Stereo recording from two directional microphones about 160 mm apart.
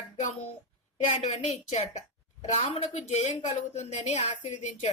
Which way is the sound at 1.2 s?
45° left (ahead or behind).